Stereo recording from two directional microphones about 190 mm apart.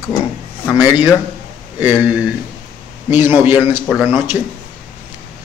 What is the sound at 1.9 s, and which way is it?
Speech, 5° right (ahead or behind).